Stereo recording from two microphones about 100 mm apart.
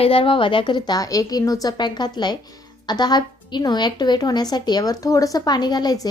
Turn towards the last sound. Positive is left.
turn(degrees=40)  # may be behind; listen again after turning